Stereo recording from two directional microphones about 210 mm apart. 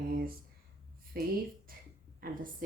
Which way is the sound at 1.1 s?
45° right (ahead or behind).